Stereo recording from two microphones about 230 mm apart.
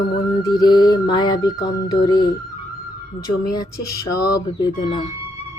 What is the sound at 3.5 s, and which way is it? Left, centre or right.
Music, centre.